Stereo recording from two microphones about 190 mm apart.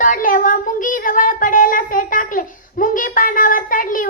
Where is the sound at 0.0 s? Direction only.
45° left (ahead or behind).